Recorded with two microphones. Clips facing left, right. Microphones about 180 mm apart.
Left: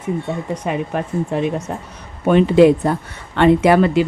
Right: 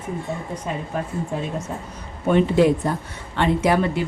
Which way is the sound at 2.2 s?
90° left.